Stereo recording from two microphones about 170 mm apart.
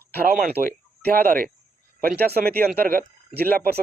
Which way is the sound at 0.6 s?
15° right (ahead or behind).